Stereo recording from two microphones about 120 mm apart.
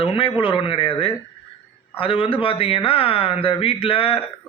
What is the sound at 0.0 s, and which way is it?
Speech, 50° left (ahead or behind).